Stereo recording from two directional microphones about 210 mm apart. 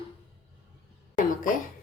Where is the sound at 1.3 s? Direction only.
40° left (ahead or behind).